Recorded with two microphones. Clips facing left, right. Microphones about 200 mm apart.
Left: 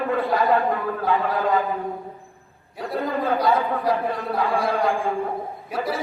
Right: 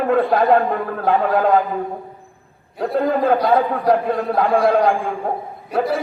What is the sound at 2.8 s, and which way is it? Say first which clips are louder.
A man's voice: right 7 dB; 50° right (ahead or behind).